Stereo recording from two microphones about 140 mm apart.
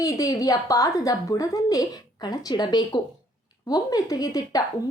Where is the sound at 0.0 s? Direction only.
25° left (ahead or behind).